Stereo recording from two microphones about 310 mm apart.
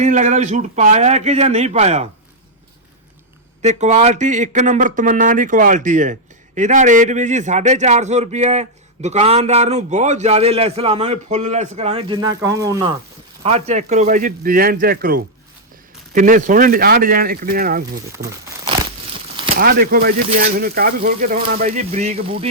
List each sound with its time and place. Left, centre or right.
0.0 s speech: right
3.6 s speech: right
18.2 s crumpling: centre
19.5 s speech: right